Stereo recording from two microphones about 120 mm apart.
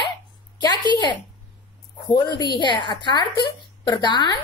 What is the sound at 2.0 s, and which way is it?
Speech, 40° left (ahead or behind).